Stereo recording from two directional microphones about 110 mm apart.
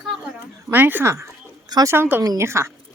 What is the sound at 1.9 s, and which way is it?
Speech, 20° right (ahead or behind).